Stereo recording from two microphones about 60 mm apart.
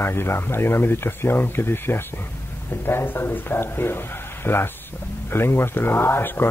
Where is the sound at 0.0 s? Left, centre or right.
Left.